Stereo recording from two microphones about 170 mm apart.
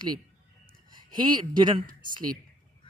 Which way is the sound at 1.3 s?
25° right (ahead or behind).